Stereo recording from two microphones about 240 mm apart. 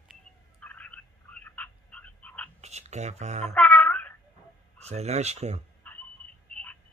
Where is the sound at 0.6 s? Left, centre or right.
Centre.